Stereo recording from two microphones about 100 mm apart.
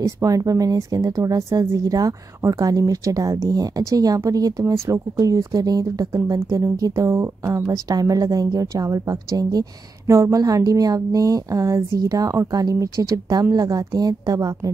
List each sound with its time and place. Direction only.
0.0 s a woman's voice: 35° right (ahead or behind)
7.6 s a woman's voice: 40° right (ahead or behind)